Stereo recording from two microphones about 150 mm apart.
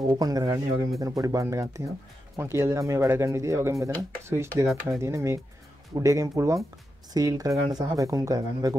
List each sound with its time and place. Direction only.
0.1 s speech: 25° right (ahead or behind)